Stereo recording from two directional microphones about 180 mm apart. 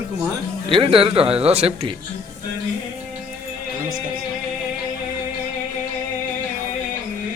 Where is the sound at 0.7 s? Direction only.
30° right (ahead or behind).